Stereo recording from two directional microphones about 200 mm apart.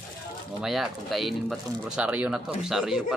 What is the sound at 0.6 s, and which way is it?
Speech, centre (ahead or behind).